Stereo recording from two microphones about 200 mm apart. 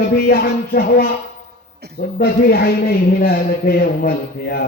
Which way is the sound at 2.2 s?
50° left (ahead or behind).